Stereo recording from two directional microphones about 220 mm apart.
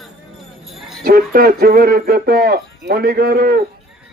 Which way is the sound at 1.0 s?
40° right (ahead or behind).